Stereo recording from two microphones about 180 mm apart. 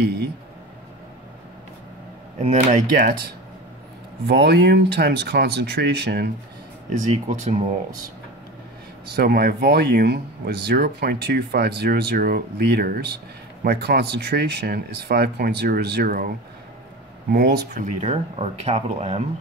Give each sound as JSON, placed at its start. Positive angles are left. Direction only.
{"t": 2.4, "sound": "speech", "side_deg": -45}
{"t": 4.3, "sound": "speech", "side_deg": -65}
{"t": 6.9, "sound": "speech", "side_deg": -40}
{"t": 9.1, "sound": "speech", "side_deg": -60}
{"t": 18.0, "sound": "speech", "side_deg": -35}